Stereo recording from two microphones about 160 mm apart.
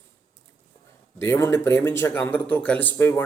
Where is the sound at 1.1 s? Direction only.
15° left (ahead or behind).